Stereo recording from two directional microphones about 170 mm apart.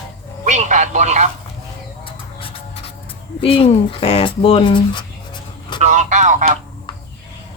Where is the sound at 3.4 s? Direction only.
35° left (ahead or behind).